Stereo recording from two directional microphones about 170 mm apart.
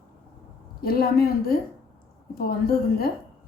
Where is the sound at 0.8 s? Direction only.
60° left (ahead or behind).